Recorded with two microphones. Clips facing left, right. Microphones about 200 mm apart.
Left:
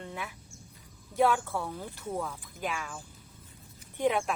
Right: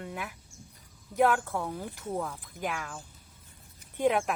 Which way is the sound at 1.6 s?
10° right (ahead or behind).